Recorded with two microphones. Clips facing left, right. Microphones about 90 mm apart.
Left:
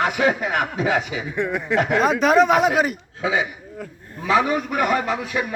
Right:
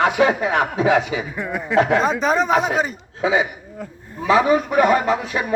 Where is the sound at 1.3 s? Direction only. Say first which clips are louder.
Left 2 dB; 5° right (ahead or behind).